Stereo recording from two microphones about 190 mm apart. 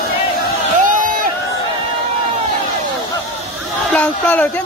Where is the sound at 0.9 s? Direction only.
45° right (ahead or behind).